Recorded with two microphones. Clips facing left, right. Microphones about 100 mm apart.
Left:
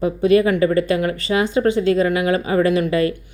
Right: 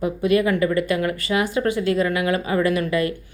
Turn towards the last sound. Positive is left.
turn(degrees=30)  # may be behind; listen again after turning